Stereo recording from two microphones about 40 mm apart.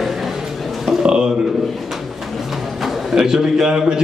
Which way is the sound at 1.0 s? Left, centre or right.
Centre.